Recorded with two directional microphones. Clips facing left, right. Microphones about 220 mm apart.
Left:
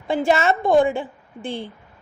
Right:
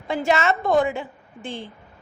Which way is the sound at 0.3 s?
30° left (ahead or behind).